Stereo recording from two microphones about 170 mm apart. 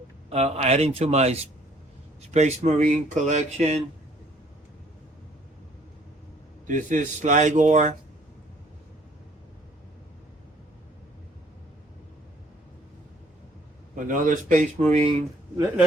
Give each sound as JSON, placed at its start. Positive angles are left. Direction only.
{"t": 0.3, "sound": "a man's voice", "side_deg": -40}
{"t": 6.7, "sound": "speech", "side_deg": -50}
{"t": 13.9, "sound": "speech", "side_deg": -50}